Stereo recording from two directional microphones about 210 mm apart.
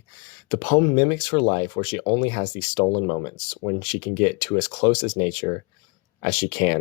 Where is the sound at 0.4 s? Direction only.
25° left (ahead or behind).